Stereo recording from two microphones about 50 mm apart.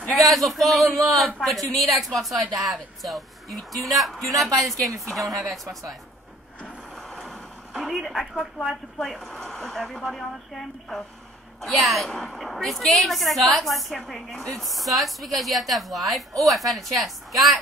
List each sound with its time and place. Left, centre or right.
0.1 s a man's voice: centre
7.0 s vehicle: centre
7.8 s a man's voice: centre